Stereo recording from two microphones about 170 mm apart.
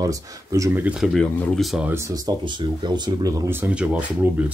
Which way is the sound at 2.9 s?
20° right (ahead or behind).